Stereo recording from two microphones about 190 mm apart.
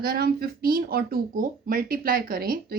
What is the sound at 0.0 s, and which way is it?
Speech, 55° right (ahead or behind).